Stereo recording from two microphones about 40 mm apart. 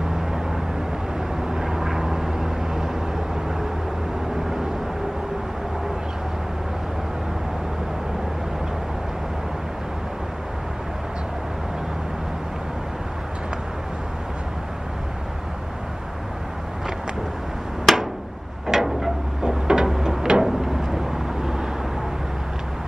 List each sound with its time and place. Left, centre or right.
1.5 s vehicle: centre
17.9 s a sound: centre
20.4 s vehicle: centre